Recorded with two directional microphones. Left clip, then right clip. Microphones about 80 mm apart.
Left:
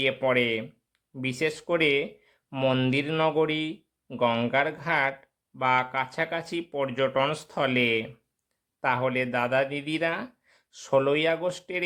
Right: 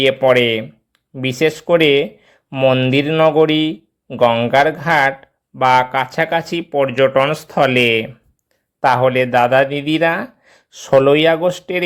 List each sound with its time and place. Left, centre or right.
0.2 s speech: right
2.5 s speech: centre
3.1 s a sound: centre
3.3 s speech: right
4.3 s speech: centre
4.5 s speech: right